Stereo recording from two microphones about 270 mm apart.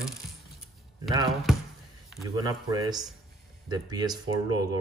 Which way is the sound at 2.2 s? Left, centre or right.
Centre.